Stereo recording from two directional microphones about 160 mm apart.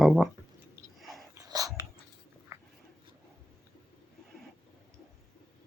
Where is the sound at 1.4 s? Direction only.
20° right (ahead or behind).